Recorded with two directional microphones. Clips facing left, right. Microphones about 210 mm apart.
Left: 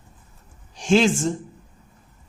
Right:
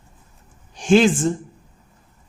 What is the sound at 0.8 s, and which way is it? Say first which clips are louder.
Speech: right 3 dB; 55° right (ahead or behind).